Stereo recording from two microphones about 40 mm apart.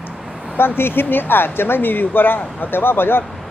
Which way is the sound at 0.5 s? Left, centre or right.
Left.